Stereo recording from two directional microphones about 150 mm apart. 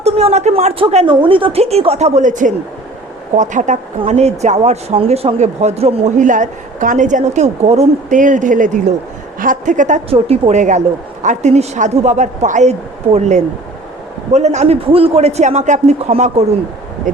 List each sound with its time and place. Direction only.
0.0 s a woman's voice: 45° right (ahead or behind)
10.1 s speech: 40° right (ahead or behind)